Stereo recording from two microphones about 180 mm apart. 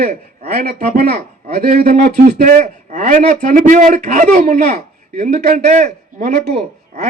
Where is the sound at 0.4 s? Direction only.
60° right (ahead or behind).